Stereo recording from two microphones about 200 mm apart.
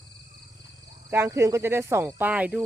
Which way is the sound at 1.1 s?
10° right (ahead or behind).